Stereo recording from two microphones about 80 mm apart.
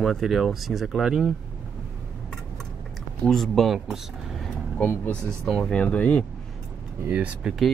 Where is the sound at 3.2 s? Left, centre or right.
Centre.